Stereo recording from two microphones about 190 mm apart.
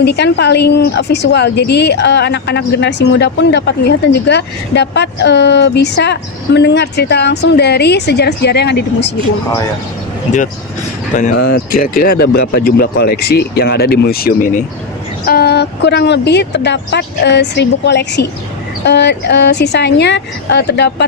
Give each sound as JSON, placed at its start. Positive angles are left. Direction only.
{"t": 0.0, "sound": "a woman's voice", "side_deg": 60}
{"t": 11.1, "sound": "speech", "side_deg": 45}
{"t": 15.3, "sound": "a woman's voice", "side_deg": 55}